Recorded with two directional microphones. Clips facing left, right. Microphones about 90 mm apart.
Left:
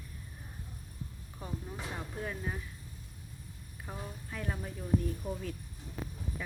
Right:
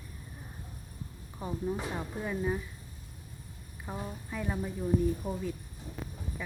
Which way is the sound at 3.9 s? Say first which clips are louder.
Right 4 dB; 10° right (ahead or behind).